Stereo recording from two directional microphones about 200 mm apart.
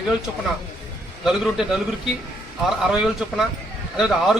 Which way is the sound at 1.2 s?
Centre (ahead or behind).